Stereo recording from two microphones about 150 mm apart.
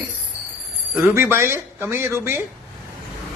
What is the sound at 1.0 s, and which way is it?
Speech, 15° right (ahead or behind).